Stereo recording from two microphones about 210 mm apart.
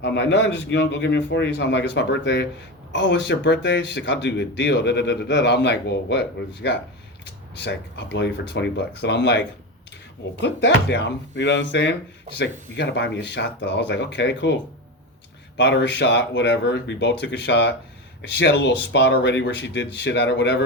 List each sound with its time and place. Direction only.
0.0 s speech: 55° left (ahead or behind)